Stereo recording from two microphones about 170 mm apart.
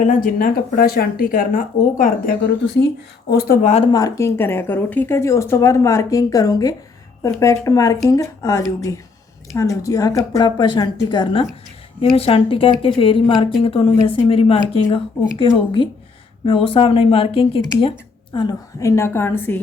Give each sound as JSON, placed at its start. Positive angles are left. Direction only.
{"t": 0.0, "sound": "speech", "side_deg": 50}
{"t": 2.7, "sound": "speech", "side_deg": 80}
{"t": 3.6, "sound": "speech", "side_deg": 40}
{"t": 3.9, "sound": "a woman's voice", "side_deg": 20}
{"t": 18.3, "sound": "a woman's voice", "side_deg": 20}